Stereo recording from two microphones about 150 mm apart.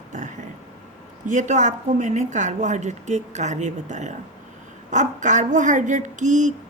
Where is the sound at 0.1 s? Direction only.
55° right (ahead or behind).